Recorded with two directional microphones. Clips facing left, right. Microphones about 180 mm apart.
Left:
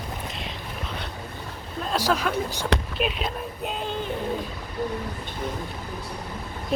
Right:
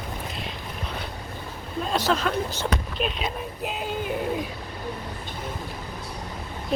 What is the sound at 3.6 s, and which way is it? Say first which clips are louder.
Speech: even; 5° right (ahead or behind).